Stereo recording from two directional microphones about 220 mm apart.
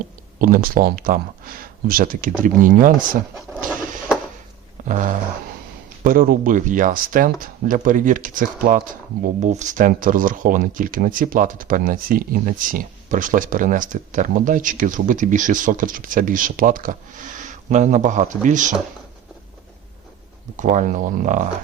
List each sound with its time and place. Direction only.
0.3 s speech: 40° right (ahead or behind)
4.9 s speech: 35° right (ahead or behind)
20.6 s speech: 35° right (ahead or behind)